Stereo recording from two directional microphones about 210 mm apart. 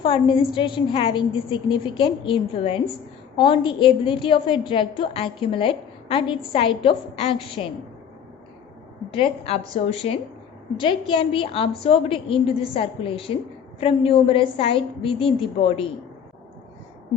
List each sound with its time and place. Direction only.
0.0 s a woman's voice: 25° left (ahead or behind)
9.0 s a woman's voice: 25° left (ahead or behind)